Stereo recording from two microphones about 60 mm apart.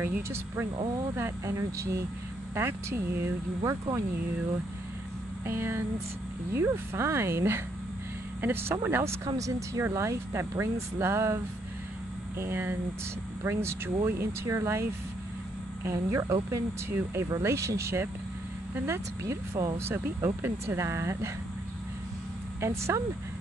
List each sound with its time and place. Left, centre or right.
1.1 s speech: right
5.5 s speech: right
16.9 s speech: right
17.4 s speech: right
19.9 s speech: right
22.6 s speech: right